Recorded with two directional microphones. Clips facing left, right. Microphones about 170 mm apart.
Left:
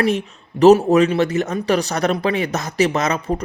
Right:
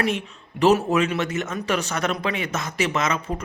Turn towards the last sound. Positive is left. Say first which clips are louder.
# left 4 dB
turn(degrees=35)  # may be behind; listen again after turning